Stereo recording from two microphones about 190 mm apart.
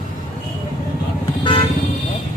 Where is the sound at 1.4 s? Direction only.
30° left (ahead or behind).